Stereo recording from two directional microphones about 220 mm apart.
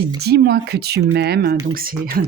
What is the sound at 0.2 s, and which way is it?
Speech, 50° right (ahead or behind).